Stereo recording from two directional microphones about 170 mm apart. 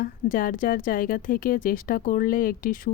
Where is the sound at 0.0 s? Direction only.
55° left (ahead or behind).